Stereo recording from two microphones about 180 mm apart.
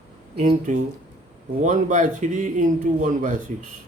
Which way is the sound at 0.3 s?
40° right (ahead or behind).